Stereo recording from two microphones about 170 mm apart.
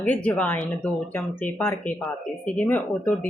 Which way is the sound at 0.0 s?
10° left (ahead or behind).